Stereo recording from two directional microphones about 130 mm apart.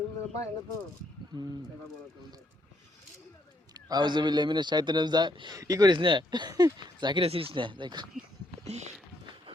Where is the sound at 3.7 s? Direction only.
30° right (ahead or behind).